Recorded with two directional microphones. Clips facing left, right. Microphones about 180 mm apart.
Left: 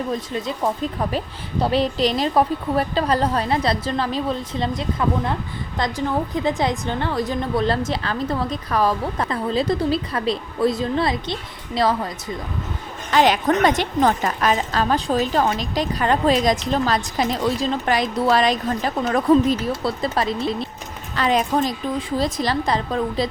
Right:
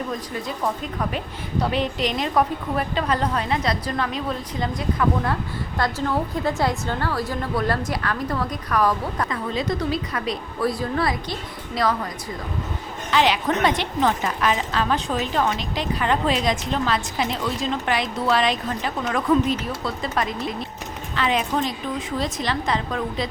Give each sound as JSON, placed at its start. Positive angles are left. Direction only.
{"t": 1.7, "sound": "a woman's voice", "side_deg": 35}
{"t": 13.1, "sound": "a woman's voice", "side_deg": 45}